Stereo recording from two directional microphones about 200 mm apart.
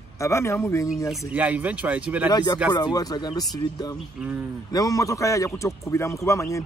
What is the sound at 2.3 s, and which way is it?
A man's voice, 20° left (ahead or behind).